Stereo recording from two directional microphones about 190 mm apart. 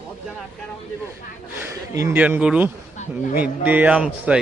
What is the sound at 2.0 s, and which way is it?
A man's voice, 10° right (ahead or behind).